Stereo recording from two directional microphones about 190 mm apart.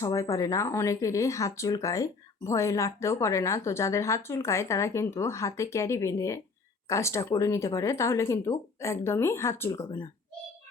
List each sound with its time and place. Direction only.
0.0 s speech: 15° left (ahead or behind)